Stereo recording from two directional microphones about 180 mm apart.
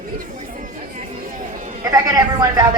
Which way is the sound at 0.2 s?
45° right (ahead or behind).